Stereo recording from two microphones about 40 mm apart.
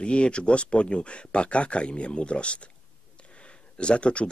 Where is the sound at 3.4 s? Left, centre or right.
Left.